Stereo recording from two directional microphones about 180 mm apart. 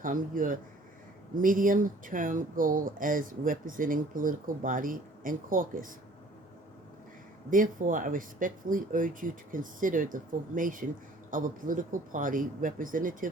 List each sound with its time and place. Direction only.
0.0 s speech: 50° right (ahead or behind)
7.5 s speech: 50° right (ahead or behind)